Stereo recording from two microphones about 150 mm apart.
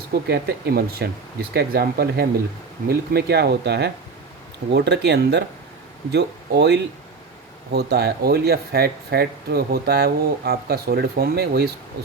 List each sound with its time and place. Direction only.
0.1 s speech: 90° right